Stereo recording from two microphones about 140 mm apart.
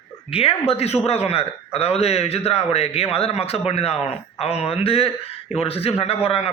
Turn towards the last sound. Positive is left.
turn(degrees=45)  # may be behind; listen again after turning